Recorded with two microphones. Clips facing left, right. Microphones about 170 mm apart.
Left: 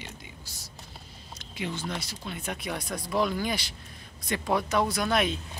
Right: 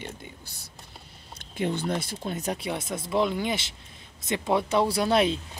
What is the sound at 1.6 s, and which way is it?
Speech, 55° right (ahead or behind).